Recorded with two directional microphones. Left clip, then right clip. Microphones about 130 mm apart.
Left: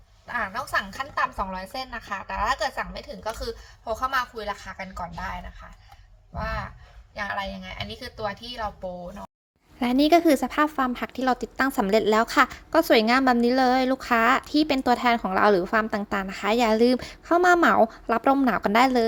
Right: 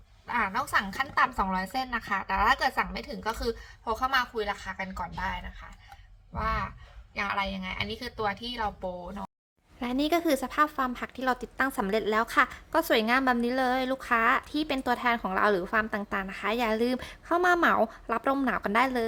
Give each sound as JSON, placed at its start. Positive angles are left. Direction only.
{"t": 0.3, "sound": "a woman's voice", "side_deg": -15}
{"t": 9.8, "sound": "a woman's voice", "side_deg": 25}